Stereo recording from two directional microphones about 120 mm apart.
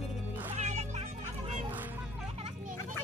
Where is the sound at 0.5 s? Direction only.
70° right (ahead or behind).